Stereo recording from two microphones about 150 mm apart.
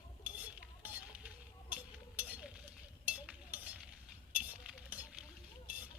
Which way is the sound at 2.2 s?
10° right (ahead or behind).